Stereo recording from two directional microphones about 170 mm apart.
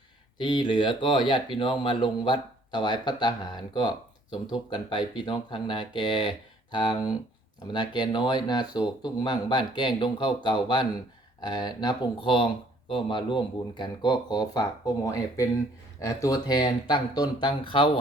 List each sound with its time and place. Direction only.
0.3 s speech: 25° left (ahead or behind)
3.8 s a sound: 25° left (ahead or behind)
4.7 s speech: 25° left (ahead or behind)